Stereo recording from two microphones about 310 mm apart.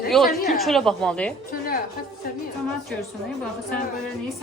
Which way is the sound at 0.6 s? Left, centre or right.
Centre.